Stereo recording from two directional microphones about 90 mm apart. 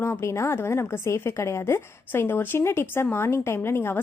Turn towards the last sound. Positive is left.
turn(degrees=25)  # may be behind; listen again after turning